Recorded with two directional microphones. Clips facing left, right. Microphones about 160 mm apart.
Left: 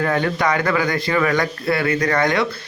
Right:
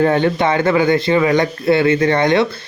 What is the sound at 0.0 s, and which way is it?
A man's voice, 25° right (ahead or behind).